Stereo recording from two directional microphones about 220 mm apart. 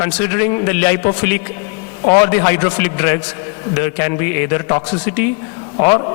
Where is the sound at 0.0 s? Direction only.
15° left (ahead or behind).